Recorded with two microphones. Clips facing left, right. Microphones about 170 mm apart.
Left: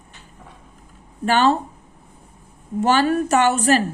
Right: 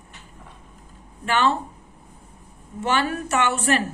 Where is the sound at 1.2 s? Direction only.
35° left (ahead or behind).